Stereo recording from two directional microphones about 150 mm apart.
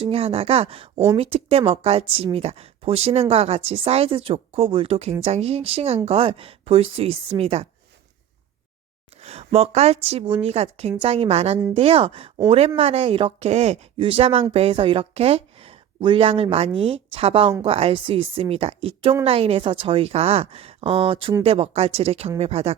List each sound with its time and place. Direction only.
0.0 s speech: 40° right (ahead or behind)
9.2 s speech: 45° right (ahead or behind)